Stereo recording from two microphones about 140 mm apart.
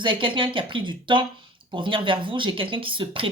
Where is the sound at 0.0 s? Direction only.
35° right (ahead or behind).